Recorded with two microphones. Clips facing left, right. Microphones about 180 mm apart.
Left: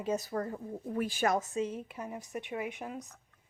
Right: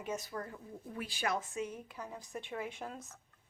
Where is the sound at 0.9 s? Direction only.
50° left (ahead or behind).